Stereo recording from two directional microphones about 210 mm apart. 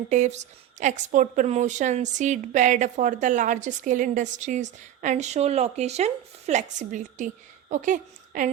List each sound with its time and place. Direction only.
0.1 s a woman's voice: 35° right (ahead or behind)